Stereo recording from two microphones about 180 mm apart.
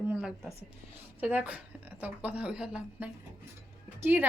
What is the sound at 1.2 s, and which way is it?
A woman's voice, 10° right (ahead or behind).